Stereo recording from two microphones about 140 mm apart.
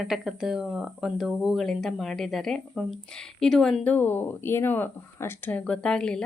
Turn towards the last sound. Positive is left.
turn(degrees=5)  # may be behind; listen again after turning